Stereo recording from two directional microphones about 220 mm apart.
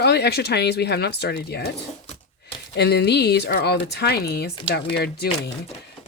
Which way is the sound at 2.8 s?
50° left (ahead or behind).